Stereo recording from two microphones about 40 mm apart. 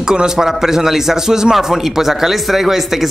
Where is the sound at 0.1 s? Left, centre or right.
Centre.